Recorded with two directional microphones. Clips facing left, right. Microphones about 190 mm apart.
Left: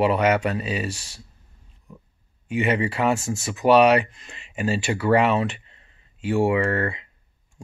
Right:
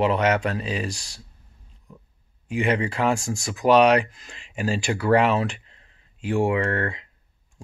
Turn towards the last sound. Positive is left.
turn(degrees=5)  # may be behind; listen again after turning